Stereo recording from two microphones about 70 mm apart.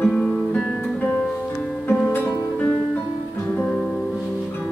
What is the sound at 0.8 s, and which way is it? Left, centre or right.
Music, centre.